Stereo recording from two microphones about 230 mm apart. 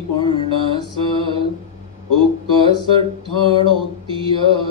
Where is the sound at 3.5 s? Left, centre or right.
Right.